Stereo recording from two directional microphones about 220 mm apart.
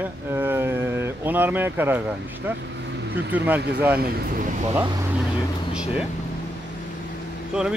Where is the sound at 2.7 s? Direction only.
50° right (ahead or behind).